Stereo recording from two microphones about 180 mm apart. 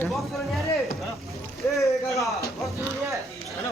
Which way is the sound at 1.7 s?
15° left (ahead or behind).